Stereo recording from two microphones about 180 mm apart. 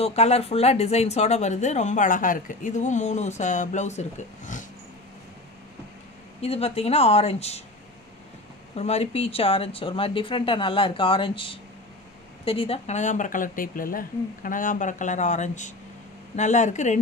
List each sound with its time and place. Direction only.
0.0 s speech: 35° left (ahead or behind)
6.4 s speech: 35° left (ahead or behind)
8.7 s speech: 35° left (ahead or behind)